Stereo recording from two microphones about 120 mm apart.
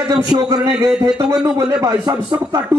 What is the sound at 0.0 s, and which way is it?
Speech, 30° right (ahead or behind).